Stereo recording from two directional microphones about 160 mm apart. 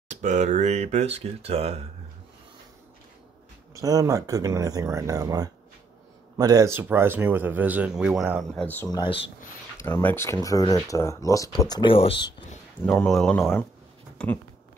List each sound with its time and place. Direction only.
0.1 s speech: 50° right (ahead or behind)
3.7 s speech: 20° right (ahead or behind); by 8.6 s 5° right (ahead or behind)
8.6 s speech: 10° left (ahead or behind)
8.9 s speech: 30° left (ahead or behind)
9.8 s speech: 15° left (ahead or behind); by 12.4 s 30° left (ahead or behind)
12.8 s speech: 5° left (ahead or behind)